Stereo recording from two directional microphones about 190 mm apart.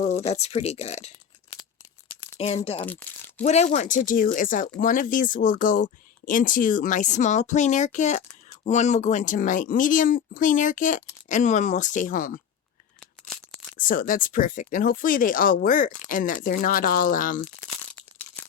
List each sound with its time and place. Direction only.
0.3 s speech: 35° left (ahead or behind)
2.4 s speech: 35° left (ahead or behind)
2.8 s crumpling: 10° left (ahead or behind)
3.4 s speech: 35° left (ahead or behind)
13.0 s a sound: centre (ahead or behind)
13.7 s speech: 45° left (ahead or behind)